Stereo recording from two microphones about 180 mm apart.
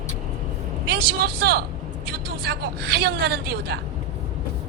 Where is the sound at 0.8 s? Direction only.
60° right (ahead or behind).